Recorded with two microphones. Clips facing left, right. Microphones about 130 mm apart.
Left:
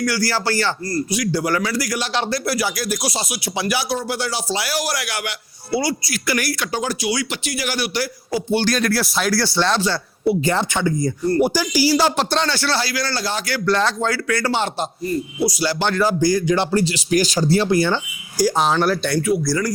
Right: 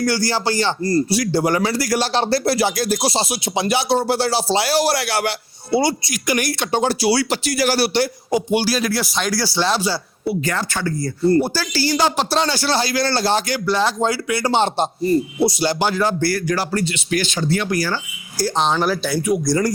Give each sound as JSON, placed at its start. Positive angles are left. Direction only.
{"t": 0.0, "sound": "speech", "side_deg": -25}
{"t": 1.1, "sound": "speech", "side_deg": -30}
{"t": 10.2, "sound": "speech", "side_deg": 25}
{"t": 10.8, "sound": "speech", "side_deg": 15}
{"t": 12.4, "sound": "speech", "side_deg": -15}
{"t": 13.7, "sound": "speech", "side_deg": -5}
{"t": 15.8, "sound": "speech", "side_deg": -5}
{"t": 16.2, "sound": "speech", "side_deg": 20}
{"t": 18.3, "sound": "speech", "side_deg": 10}
{"t": 19.2, "sound": "speech", "side_deg": -15}